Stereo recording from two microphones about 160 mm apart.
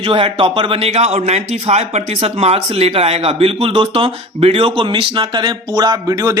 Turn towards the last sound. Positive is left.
turn(degrees=-20)  # may be behind; listen again after turning